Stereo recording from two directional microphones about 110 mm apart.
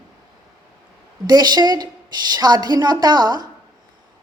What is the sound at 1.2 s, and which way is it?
A woman's voice, 40° right (ahead or behind).